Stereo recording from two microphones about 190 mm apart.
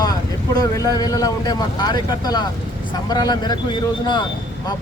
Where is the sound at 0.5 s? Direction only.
20° left (ahead or behind).